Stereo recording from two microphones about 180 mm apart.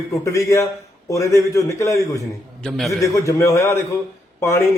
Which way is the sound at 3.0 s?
15° left (ahead or behind).